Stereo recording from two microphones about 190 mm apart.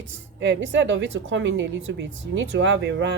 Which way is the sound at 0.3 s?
70° right (ahead or behind).